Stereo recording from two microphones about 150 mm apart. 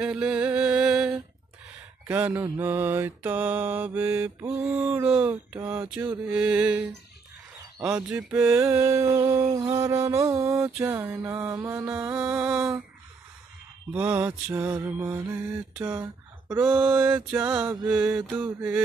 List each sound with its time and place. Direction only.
0.0 s a sound: 5° right (ahead or behind)
2.0 s music: 10° right (ahead or behind)
7.8 s a sound: 5° right (ahead or behind)
10.9 s music: 15° right (ahead or behind)
13.9 s music: 10° right (ahead or behind)
15.8 s speech: 15° right (ahead or behind)
16.6 s music: 10° right (ahead or behind)